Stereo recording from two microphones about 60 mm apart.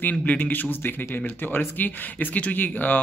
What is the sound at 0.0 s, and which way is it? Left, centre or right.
Speech, left.